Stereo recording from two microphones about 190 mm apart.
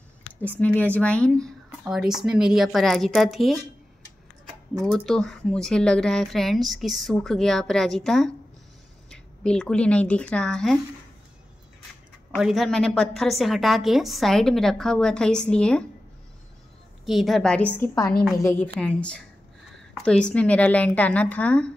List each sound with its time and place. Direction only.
0.4 s speech: 10° left (ahead or behind)
4.7 s speech: 5° left (ahead or behind)
12.4 s speech: centre (ahead or behind)
17.0 s a woman's voice: centre (ahead or behind)